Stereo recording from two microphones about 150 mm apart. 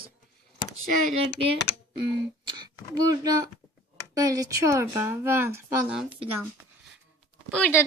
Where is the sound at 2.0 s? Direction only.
30° right (ahead or behind).